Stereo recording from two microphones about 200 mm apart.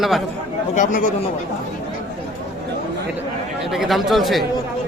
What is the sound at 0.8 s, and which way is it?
Speech, 40° left (ahead or behind).